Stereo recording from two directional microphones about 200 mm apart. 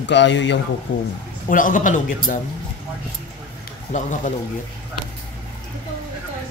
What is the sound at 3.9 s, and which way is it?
Speech, 35° left (ahead or behind).